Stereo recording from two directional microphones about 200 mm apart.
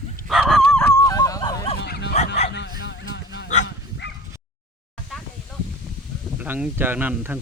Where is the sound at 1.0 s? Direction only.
20° left (ahead or behind).